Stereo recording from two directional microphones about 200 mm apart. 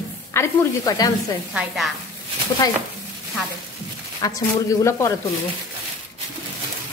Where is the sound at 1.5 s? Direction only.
5° right (ahead or behind).